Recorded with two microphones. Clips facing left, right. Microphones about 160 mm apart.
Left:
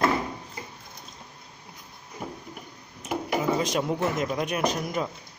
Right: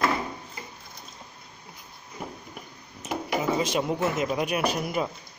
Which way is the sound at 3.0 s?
Centre (ahead or behind).